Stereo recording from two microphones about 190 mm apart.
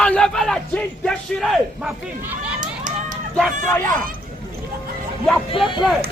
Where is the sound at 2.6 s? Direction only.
45° right (ahead or behind).